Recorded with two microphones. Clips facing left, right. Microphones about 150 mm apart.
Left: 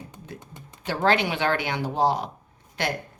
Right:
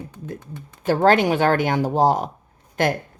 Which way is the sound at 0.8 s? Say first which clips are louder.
Right 7 dB; 45° right (ahead or behind).